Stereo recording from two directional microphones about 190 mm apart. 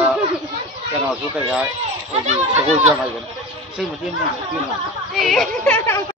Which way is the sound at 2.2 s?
35° right (ahead or behind).